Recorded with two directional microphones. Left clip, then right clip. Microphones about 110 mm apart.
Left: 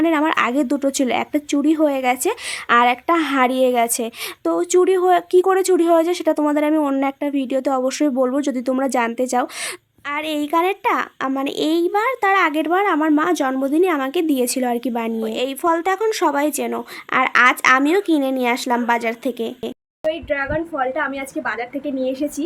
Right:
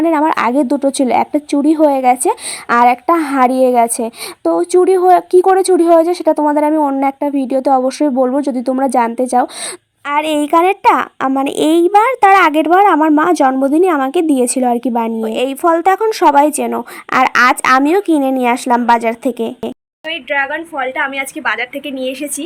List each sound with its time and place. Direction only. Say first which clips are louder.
0.0 s a woman's voice: right 5 dB; 25° right (ahead or behind)
6.7 s a woman's voice: right 5 dB; centre (ahead or behind)
7.0 s a woman's voice: right 6 dB; 20° right (ahead or behind)
10.1 s a woman's voice: right 8 dB; 50° right (ahead or behind)
20.1 s a woman's voice: right 4 dB; 5° left (ahead or behind)